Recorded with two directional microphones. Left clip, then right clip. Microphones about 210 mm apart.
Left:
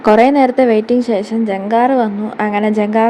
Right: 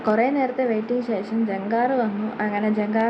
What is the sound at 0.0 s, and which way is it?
A woman's voice, 45° left (ahead or behind).